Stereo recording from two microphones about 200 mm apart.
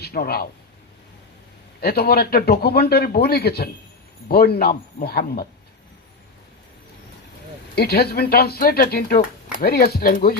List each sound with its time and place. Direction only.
0.0 s speech: 50° left (ahead or behind)
1.8 s speech: 50° left (ahead or behind)
7.8 s speech: 50° left (ahead or behind)